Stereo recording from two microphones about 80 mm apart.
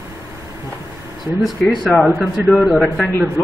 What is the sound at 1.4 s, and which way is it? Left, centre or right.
A man's voice, centre.